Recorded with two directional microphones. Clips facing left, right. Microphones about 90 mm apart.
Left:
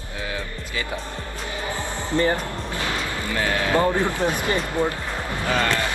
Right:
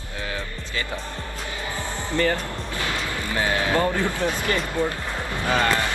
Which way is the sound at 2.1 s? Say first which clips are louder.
Left 2 dB; 25° left (ahead or behind).